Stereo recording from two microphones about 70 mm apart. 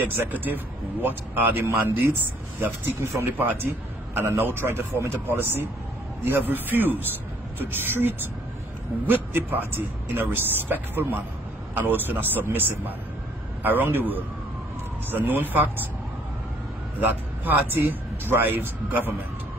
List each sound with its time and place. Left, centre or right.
0.1 s a man's voice: right
17.0 s a man's voice: right